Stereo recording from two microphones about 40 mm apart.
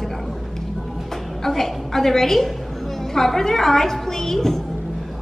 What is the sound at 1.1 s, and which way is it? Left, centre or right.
A woman's voice, centre.